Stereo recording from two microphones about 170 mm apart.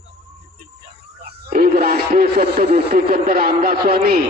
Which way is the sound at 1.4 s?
60° right (ahead or behind).